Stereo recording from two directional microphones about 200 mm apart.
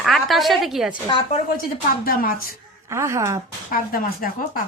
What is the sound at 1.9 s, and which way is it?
Speech, 45° left (ahead or behind).